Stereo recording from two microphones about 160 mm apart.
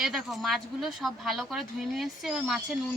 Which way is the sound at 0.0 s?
Centre (ahead or behind).